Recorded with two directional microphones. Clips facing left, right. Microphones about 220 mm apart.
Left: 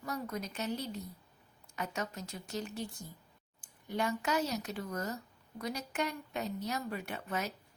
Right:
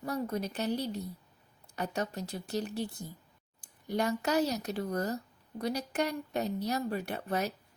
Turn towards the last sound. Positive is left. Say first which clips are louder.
# right 5 dB
turn(degrees=-35)  # may be behind; listen again after turning